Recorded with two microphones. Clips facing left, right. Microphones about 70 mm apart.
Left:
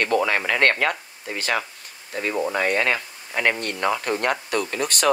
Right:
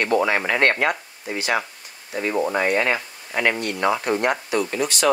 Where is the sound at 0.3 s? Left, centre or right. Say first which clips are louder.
Right 1 dB; right.